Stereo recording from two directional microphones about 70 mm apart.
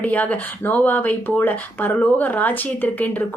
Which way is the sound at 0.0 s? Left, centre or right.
Left.